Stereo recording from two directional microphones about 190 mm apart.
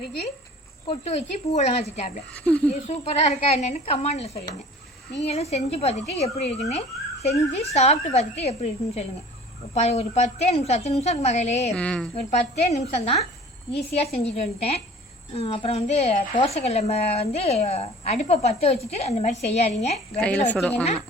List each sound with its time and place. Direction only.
0.9 s speech: 35° left (ahead or behind)
2.3 s speech: 5° left (ahead or behind)
2.6 s speech: 35° left (ahead or behind)
11.7 s a woman's voice: 5° left (ahead or behind)
12.1 s speech: 35° left (ahead or behind)
20.1 s a woman's voice: 5° left (ahead or behind)